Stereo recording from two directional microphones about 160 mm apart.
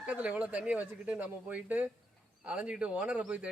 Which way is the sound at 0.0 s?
10° right (ahead or behind).